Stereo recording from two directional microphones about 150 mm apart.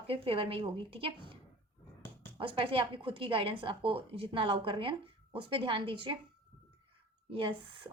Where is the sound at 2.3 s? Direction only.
35° right (ahead or behind).